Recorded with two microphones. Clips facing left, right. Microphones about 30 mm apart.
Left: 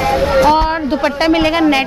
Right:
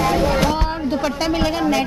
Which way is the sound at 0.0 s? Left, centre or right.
Left.